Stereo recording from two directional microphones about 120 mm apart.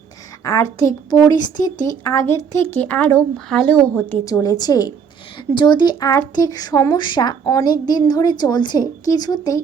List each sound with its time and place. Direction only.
0.4 s a woman's voice: 25° left (ahead or behind)
4.3 s speech: 30° left (ahead or behind)